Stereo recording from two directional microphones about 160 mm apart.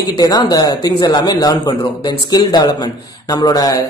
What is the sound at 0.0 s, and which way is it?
Speech, 25° left (ahead or behind).